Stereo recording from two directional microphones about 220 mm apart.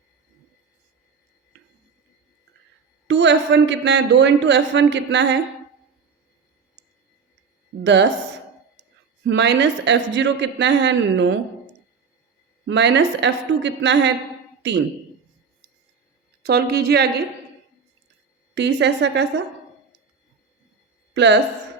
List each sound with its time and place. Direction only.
3.1 s a man's voice: 55° right (ahead or behind)
9.2 s a woman's voice: 50° right (ahead or behind)
16.4 s a woman's voice: 45° right (ahead or behind)
18.5 s a woman's voice: 55° right (ahead or behind)
21.1 s a sound: 50° right (ahead or behind)